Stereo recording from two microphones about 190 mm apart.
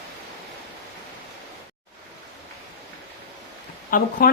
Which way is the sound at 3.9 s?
50° left (ahead or behind).